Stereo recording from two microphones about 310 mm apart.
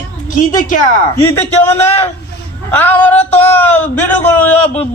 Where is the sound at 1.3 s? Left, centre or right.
Centre.